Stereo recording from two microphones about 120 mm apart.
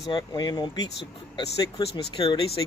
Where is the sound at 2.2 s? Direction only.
30° left (ahead or behind).